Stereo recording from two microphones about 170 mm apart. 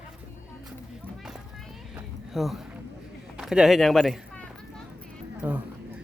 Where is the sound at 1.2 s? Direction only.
Centre (ahead or behind).